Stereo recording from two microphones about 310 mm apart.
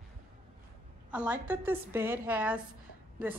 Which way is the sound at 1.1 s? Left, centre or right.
Centre.